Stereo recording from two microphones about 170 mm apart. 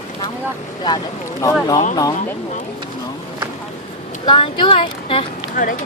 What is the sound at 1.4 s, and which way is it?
Speech, 20° left (ahead or behind).